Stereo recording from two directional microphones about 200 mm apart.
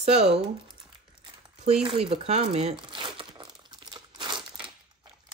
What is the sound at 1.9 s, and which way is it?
Crumpling, 30° right (ahead or behind).